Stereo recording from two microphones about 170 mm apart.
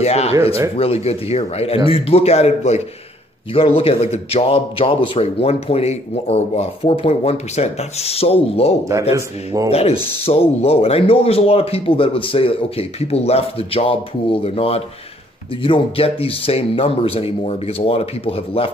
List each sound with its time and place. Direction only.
0.0 s speech: 40° left (ahead or behind)
9.1 s speech: 20° right (ahead or behind)
9.7 s speech: 35° left (ahead or behind)